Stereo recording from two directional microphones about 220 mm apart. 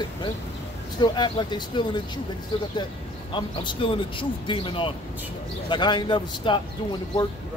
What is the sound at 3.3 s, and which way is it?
Speech, 20° left (ahead or behind).